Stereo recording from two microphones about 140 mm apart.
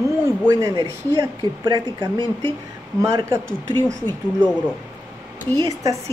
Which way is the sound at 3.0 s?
20° right (ahead or behind).